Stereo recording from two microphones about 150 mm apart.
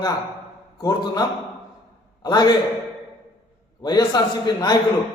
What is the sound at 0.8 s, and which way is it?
A man's voice, 25° left (ahead or behind).